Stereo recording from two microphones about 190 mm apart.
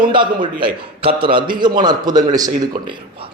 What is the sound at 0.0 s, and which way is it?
A man's voice, 25° right (ahead or behind).